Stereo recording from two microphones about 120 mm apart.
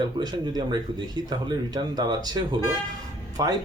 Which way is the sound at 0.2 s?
35° right (ahead or behind).